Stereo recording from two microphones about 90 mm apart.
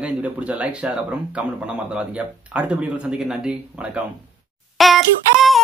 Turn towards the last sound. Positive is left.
turn(degrees=0)  # may be behind; listen again after turning